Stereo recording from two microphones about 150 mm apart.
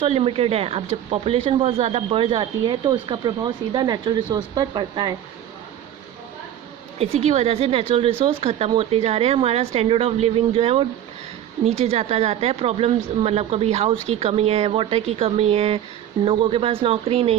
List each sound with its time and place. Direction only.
0.0 s speech: 40° right (ahead or behind)
7.0 s a woman's voice: 45° right (ahead or behind)